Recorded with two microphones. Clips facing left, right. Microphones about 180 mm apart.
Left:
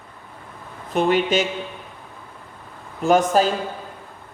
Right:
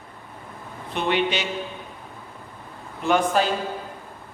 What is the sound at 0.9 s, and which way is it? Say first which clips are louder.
Speech: left 5 dB; 45° left (ahead or behind).